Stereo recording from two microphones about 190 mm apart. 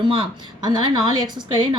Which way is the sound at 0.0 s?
25° right (ahead or behind).